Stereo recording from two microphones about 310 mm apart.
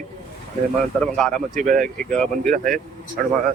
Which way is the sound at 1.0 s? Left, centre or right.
Centre.